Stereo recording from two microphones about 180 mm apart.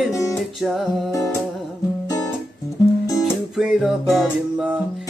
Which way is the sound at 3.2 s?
5° right (ahead or behind).